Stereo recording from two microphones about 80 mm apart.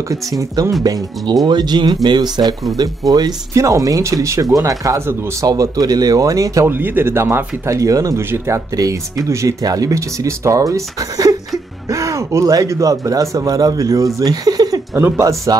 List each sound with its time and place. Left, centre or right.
0.1 s speech: right
3.5 s speech: right
5.5 s speech: right
6.7 s speech: right
7.7 s speech: right
8.2 s speech: right
15.0 s speech: right